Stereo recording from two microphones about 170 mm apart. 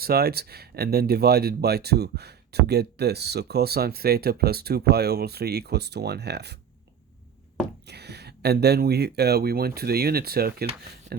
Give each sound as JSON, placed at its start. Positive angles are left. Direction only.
{"t": 0.0, "sound": "speech", "side_deg": -65}
{"t": 7.9, "sound": "speech", "side_deg": -75}